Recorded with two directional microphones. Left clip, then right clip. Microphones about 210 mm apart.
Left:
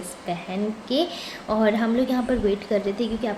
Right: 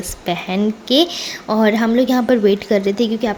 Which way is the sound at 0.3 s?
45° right (ahead or behind).